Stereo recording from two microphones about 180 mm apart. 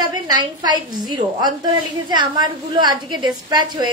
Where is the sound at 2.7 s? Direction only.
25° right (ahead or behind).